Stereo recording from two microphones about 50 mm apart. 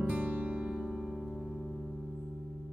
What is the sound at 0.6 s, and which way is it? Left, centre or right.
Music, centre.